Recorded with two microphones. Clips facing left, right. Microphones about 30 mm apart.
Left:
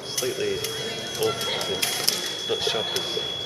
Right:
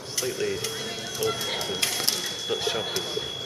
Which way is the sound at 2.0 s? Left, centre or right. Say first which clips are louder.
Left 2 dB; centre.